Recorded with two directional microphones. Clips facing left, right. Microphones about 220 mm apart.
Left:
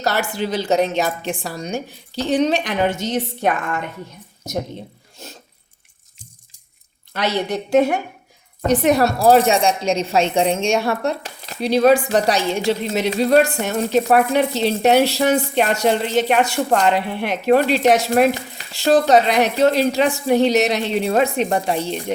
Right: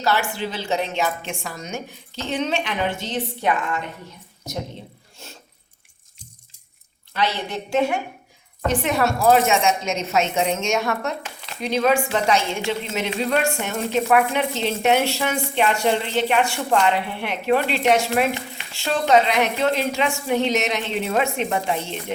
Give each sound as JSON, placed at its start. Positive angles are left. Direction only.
{"t": 0.0, "sound": "a woman's voice", "side_deg": 40}
{"t": 7.1, "sound": "a woman's voice", "side_deg": 40}